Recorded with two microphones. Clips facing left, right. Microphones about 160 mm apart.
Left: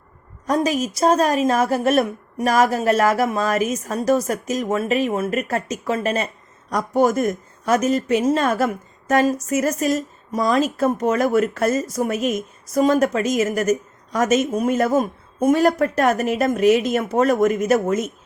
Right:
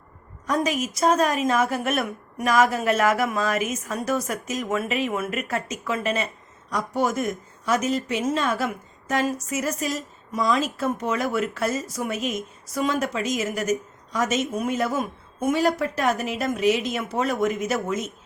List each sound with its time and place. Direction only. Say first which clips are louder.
0.4 s a woman's voice: left 4 dB; 35° left (ahead or behind)